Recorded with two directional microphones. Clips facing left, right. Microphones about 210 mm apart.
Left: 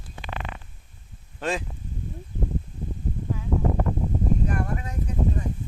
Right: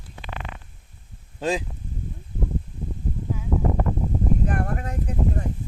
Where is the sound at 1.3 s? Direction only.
15° right (ahead or behind).